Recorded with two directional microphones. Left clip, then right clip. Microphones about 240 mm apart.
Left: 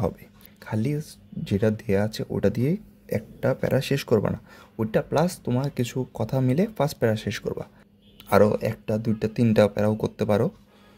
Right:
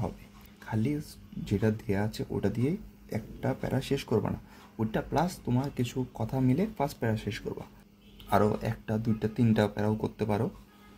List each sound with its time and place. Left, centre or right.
1.5 s speech: left